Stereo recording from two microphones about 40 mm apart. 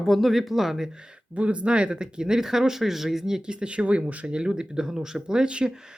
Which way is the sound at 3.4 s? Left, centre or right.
Right.